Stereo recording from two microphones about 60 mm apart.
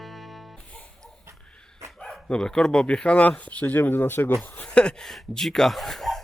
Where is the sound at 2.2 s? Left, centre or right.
Centre; by 4.3 s left.